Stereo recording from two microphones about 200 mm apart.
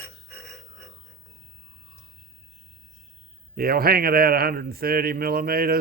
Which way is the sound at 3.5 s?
50° right (ahead or behind).